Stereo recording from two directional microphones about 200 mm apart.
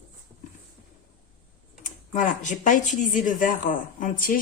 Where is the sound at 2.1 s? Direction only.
40° left (ahead or behind).